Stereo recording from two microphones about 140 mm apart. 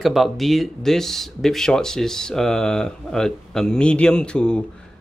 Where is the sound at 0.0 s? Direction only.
Centre (ahead or behind).